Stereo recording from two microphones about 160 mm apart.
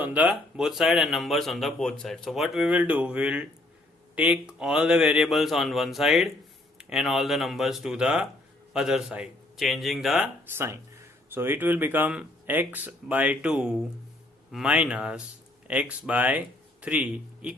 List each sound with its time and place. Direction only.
0.0 s speech: 10° right (ahead or behind)
10.5 s speech: 10° right (ahead or behind)